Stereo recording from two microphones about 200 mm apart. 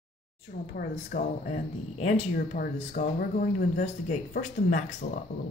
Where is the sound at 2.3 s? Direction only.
45° left (ahead or behind).